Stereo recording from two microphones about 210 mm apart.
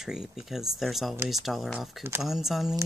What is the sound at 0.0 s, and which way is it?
Speech, 5° right (ahead or behind).